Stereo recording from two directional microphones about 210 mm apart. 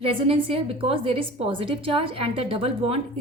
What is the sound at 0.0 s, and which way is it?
A woman's voice, 25° right (ahead or behind).